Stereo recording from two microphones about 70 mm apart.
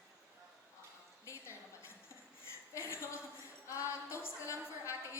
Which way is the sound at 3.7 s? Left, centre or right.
Left.